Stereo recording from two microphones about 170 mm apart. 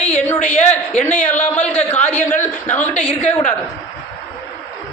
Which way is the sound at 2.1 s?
10° left (ahead or behind).